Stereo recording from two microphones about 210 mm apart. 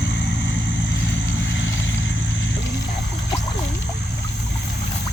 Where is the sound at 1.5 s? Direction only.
60° left (ahead or behind).